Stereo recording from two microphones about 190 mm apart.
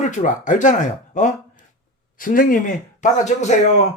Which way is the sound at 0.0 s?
40° left (ahead or behind).